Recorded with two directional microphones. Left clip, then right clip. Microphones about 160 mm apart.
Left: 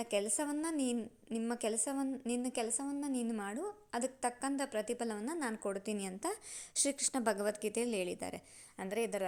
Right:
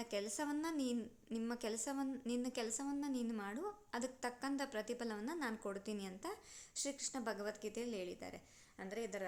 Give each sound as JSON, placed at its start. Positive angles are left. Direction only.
{"t": 0.0, "sound": "a woman's voice", "side_deg": 30}